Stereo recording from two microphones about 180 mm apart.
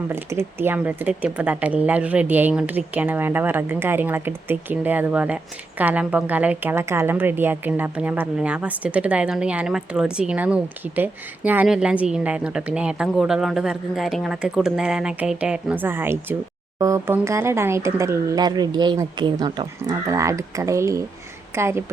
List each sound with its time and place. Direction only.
0.1 s speech: 15° right (ahead or behind)